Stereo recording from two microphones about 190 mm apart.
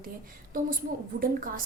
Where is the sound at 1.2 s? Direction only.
45° right (ahead or behind).